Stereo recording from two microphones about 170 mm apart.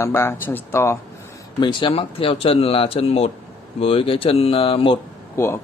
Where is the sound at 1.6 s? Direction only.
30° left (ahead or behind).